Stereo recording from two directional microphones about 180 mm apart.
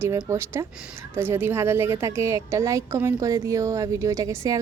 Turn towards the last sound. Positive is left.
turn(degrees=-15)  # may be behind; listen again after turning